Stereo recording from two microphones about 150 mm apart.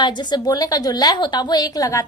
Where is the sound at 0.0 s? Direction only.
30° left (ahead or behind).